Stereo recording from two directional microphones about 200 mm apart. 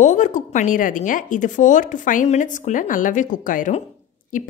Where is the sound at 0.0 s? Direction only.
40° left (ahead or behind).